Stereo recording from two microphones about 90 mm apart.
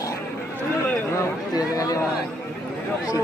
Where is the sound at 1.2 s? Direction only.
40° left (ahead or behind).